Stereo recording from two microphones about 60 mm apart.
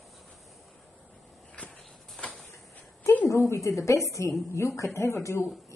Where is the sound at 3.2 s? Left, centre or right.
Left.